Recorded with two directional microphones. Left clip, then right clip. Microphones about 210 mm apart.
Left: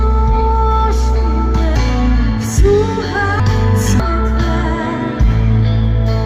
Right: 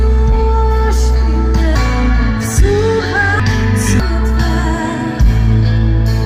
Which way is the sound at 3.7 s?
35° left (ahead or behind).